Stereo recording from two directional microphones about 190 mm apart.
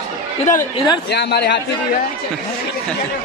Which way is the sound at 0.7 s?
20° left (ahead or behind).